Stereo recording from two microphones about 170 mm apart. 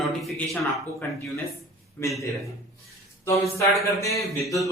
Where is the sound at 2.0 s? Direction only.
15° left (ahead or behind).